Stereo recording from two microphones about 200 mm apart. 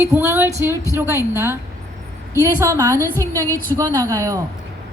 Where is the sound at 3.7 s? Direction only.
15° right (ahead or behind).